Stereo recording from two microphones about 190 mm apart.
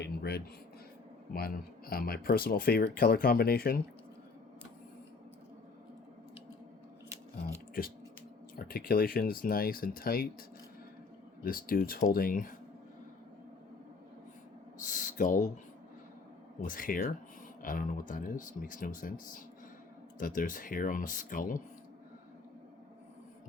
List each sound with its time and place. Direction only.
0.0 s a sound: 60° left (ahead or behind)
1.3 s speech: 50° left (ahead or behind)
8.5 s speech: 50° left (ahead or behind)
11.4 s speech: 50° left (ahead or behind)
14.8 s speech: 45° left (ahead or behind)
16.6 s speech: 45° left (ahead or behind)